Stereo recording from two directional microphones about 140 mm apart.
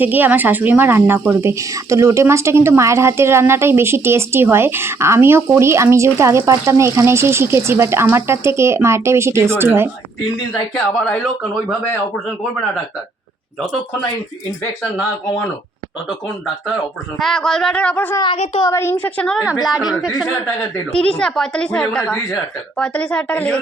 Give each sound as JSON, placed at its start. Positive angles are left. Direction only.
{"t": 0.0, "sound": "speech", "side_deg": -15}
{"t": 11.0, "sound": "speech", "side_deg": 5}
{"t": 17.2, "sound": "a woman's voice", "side_deg": 5}
{"t": 20.6, "sound": "a woman's voice", "side_deg": 10}